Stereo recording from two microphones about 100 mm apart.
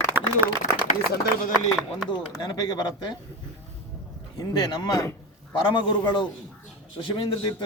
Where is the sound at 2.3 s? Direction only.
45° left (ahead or behind).